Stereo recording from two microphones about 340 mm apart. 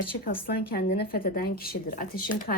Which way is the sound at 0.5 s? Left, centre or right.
Left.